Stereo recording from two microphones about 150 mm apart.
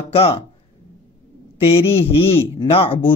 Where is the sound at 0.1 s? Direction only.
40° left (ahead or behind).